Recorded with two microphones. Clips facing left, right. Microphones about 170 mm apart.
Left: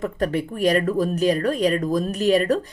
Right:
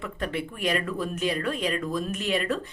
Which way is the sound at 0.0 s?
40° left (ahead or behind).